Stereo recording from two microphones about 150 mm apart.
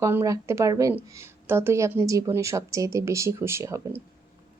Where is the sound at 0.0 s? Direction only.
20° right (ahead or behind).